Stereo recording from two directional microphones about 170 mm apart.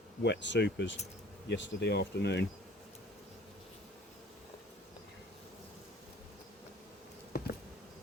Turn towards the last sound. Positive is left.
turn(degrees=65)  # may be behind; listen again after turning